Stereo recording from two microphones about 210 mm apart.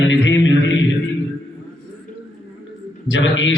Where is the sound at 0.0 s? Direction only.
65° left (ahead or behind).